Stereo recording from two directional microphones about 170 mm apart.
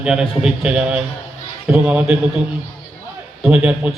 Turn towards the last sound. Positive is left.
turn(degrees=-5)  # may be behind; listen again after turning